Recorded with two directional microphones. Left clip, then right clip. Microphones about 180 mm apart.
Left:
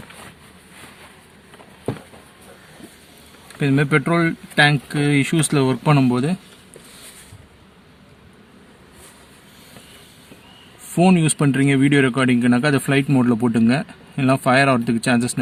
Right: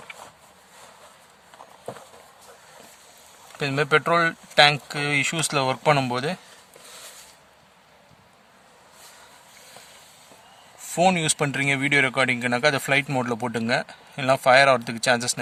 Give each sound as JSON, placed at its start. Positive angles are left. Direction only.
{"t": 3.6, "sound": "speech", "side_deg": -60}
{"t": 10.9, "sound": "speech", "side_deg": -55}